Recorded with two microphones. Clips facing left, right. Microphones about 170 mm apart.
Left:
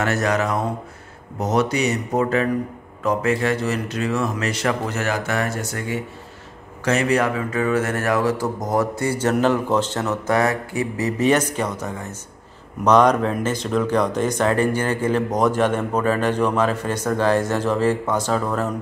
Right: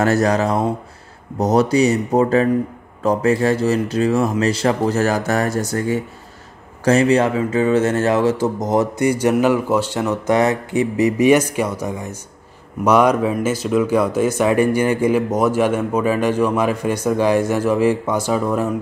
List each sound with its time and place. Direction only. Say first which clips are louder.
0.0 s speech: right 5 dB; 35° right (ahead or behind); by 18.8 s 10° right (ahead or behind)